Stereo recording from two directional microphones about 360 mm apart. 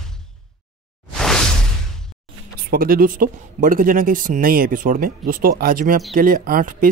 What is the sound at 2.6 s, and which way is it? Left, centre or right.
Speech, right.